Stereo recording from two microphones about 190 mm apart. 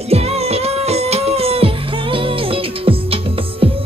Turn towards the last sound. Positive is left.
turn(degrees=-30)  # may be behind; listen again after turning